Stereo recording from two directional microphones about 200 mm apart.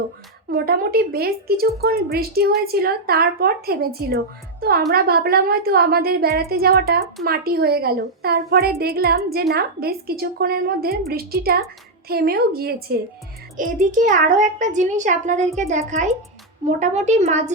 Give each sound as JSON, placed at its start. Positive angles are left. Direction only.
{"t": 0.5, "sound": "a woman's voice", "side_deg": -50}